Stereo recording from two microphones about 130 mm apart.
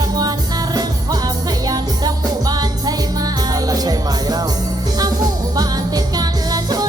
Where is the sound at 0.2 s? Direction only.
30° right (ahead or behind).